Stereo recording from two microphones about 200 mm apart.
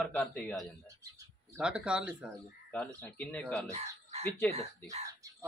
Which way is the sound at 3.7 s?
30° right (ahead or behind).